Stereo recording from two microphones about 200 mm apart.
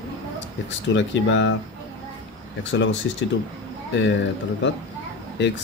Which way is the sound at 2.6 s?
65° left (ahead or behind).